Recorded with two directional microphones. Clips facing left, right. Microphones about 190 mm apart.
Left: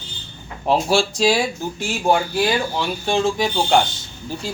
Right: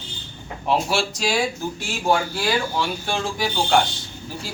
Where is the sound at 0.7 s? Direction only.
30° left (ahead or behind).